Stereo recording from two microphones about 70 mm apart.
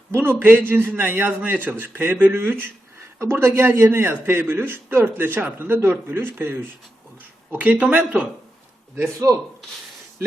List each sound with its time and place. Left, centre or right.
0.1 s a man's voice: right; by 8.3 s centre
9.2 s speech: right